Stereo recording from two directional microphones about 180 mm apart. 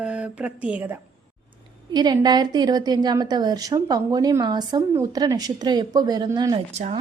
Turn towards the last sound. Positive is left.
turn(degrees=-40)  # may be behind; listen again after turning